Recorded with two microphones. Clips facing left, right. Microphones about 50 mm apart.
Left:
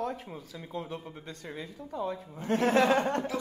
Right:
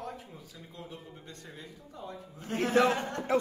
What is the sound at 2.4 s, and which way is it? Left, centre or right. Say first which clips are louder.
Speech: left 1 dB; left.